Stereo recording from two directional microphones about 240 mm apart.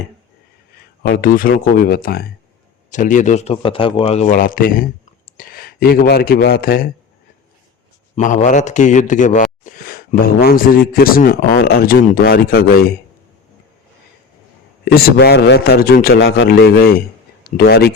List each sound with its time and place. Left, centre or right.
1.0 s a man's voice: left
8.1 s a man's voice: left
14.9 s a man's voice: left
16.1 s a man's voice: left